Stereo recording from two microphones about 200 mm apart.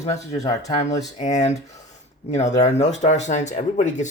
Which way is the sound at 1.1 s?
35° left (ahead or behind).